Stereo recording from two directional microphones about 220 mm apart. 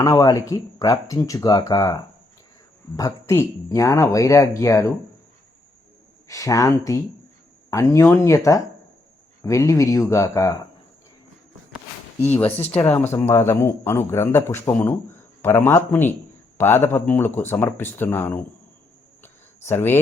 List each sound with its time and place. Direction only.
0.0 s speech: 15° left (ahead or behind)
6.2 s speech: 15° left (ahead or behind)
9.4 s speech: 15° left (ahead or behind)
12.2 s speech: 10° left (ahead or behind)
19.6 s speech: 10° left (ahead or behind)